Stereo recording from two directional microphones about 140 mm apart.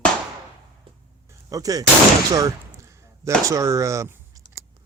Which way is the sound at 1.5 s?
25° right (ahead or behind).